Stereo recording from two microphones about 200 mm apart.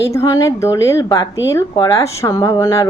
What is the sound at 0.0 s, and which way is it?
Speech, 15° left (ahead or behind).